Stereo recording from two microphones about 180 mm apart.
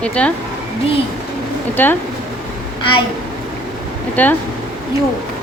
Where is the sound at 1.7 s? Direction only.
10° left (ahead or behind).